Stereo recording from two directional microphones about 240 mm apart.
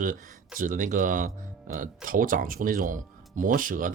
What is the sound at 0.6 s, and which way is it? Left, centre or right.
Speech, right.